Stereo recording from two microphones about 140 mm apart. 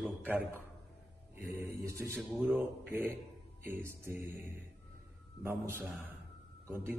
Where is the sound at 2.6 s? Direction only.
15° right (ahead or behind).